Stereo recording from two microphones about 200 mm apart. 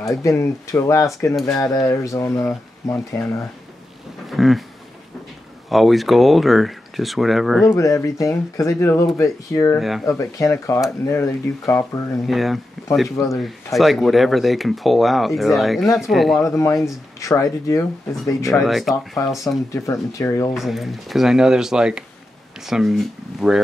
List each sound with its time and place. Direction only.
0.2 s speech: 15° left (ahead or behind)
4.3 s a sound: centre (ahead or behind)
5.7 s speech: centre (ahead or behind)
7.7 s speech: 15° left (ahead or behind)
9.8 s speech: centre (ahead or behind)
10.0 s speech: 15° left (ahead or behind)
12.3 s speech: centre (ahead or behind)
12.8 s a sound: centre (ahead or behind)
13.1 s speech: 15° left (ahead or behind)
13.7 s speech: centre (ahead or behind)
16.4 s speech: 15° left (ahead or behind)
18.5 s speech: centre (ahead or behind)
19.7 s speech: 15° left (ahead or behind)
20.5 s speech: centre (ahead or behind)